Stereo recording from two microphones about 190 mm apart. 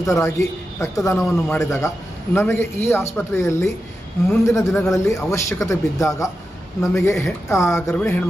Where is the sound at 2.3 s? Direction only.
10° left (ahead or behind).